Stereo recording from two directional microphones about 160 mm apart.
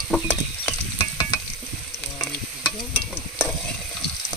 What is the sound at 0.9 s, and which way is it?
Stir, 20° left (ahead or behind).